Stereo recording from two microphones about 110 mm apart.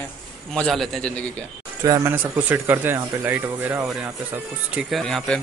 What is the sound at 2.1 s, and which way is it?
Speech, 15° right (ahead or behind).